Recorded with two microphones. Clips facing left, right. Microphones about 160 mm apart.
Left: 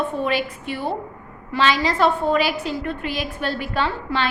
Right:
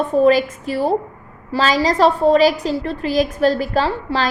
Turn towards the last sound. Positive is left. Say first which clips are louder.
# right 3 dB
turn(degrees=-35)  # may be behind; listen again after turning